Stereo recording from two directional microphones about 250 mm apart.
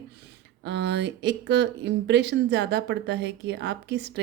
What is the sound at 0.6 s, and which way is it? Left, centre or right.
Speech, right.